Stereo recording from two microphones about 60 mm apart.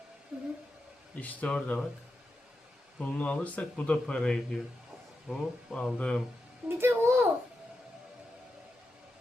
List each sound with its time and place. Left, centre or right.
0.3 s speech: centre
1.2 s speech: left
3.0 s speech: left
4.0 s a man's voice: centre
5.3 s speech: centre
5.7 s a man's voice: centre
6.7 s a woman's voice: right